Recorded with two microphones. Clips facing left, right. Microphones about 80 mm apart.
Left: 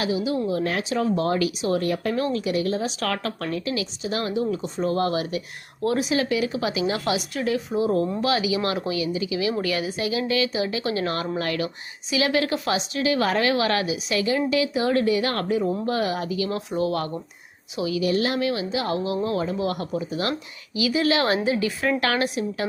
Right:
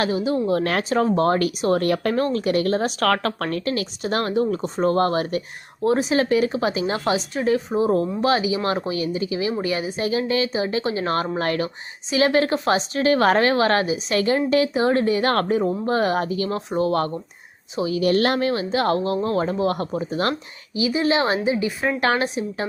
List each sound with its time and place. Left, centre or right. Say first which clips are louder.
0.0 s speech: right 3 dB; right
0.4 s speech: right 3 dB; right
0.9 s speech: right 5 dB; right
2.1 s a woman's voice: right 3 dB; right
18.0 s speech: right 5 dB; right
18.3 s a woman's voice: right 3 dB; right
20.7 s speech: right 2 dB; right